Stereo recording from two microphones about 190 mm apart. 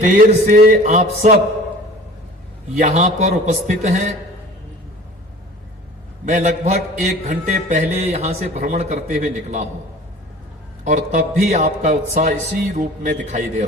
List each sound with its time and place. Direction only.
0.0 s a man's voice: 40° right (ahead or behind)
2.7 s a man's voice: 40° right (ahead or behind)
6.2 s a man's voice: 40° right (ahead or behind)
10.8 s a man's voice: 40° right (ahead or behind)